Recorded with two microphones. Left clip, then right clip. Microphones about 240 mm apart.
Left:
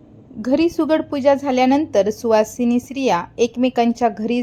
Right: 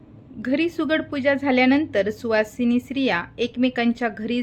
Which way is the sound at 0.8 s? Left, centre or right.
Centre.